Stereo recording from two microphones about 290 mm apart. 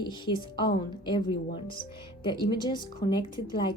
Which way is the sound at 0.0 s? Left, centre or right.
Centre.